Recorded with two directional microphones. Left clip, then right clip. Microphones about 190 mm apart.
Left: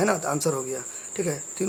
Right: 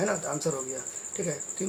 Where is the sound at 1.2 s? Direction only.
40° left (ahead or behind).